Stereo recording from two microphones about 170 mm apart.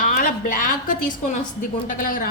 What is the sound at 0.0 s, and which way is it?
A woman's voice, 50° left (ahead or behind).